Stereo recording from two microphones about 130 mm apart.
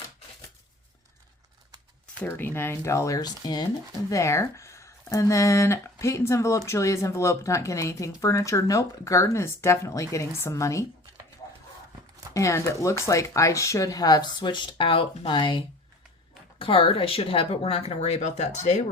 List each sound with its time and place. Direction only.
2.1 s speech: 15° left (ahead or behind)
12.3 s speech: 25° left (ahead or behind); by 18.8 s 60° left (ahead or behind)